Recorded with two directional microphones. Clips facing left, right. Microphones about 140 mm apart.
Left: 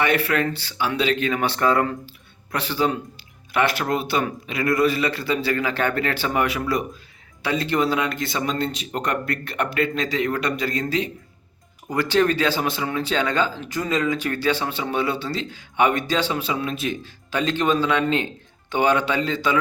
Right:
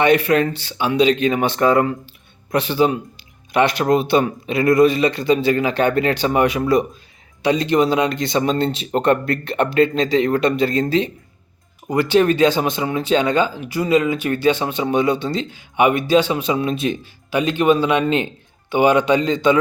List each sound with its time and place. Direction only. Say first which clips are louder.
0.0 s speech: right 6 dB; 20° right (ahead or behind)
11.9 s speech: right 4 dB; 15° right (ahead or behind)